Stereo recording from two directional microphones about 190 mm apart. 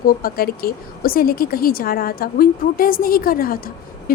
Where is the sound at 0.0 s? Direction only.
50° left (ahead or behind).